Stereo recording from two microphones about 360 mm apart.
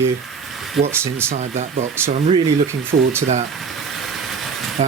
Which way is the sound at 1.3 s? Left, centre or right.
Centre.